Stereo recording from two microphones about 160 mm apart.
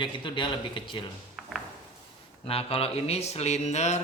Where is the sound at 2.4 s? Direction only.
35° left (ahead or behind).